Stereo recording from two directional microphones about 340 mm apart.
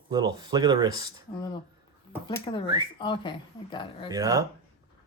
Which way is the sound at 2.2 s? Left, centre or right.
Centre.